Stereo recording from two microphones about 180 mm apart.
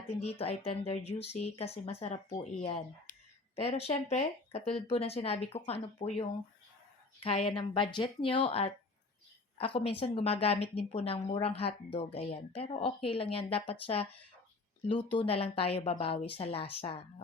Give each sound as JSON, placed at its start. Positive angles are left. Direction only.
{"t": 0.1, "sound": "speech", "side_deg": 35}